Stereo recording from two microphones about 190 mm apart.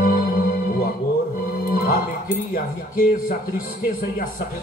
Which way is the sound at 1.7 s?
50° left (ahead or behind).